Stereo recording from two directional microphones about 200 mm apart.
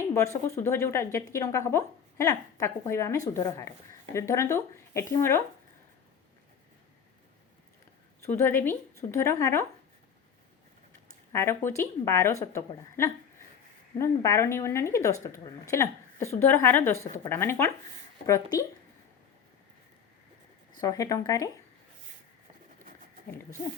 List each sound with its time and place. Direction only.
0.1 s speech: 15° left (ahead or behind)
8.3 s speech: 10° left (ahead or behind)
11.3 s speech: 10° left (ahead or behind)
20.8 s speech: 20° left (ahead or behind)